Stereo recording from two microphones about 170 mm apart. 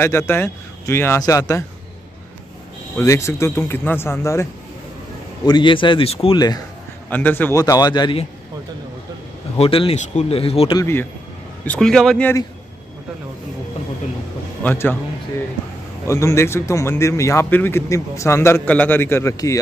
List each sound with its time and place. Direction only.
0.0 s a man's voice: 15° left (ahead or behind)
3.0 s a man's voice: 15° left (ahead or behind); by 6.4 s 35° left (ahead or behind)
7.1 s a man's voice: 10° left (ahead or behind); by 8.3 s 30° left (ahead or behind)
9.6 s speech: 35° left (ahead or behind)
10.8 s a man's voice: 15° left (ahead or behind)
14.6 s a man's voice: 10° left (ahead or behind)
16.1 s a man's voice: 15° left (ahead or behind)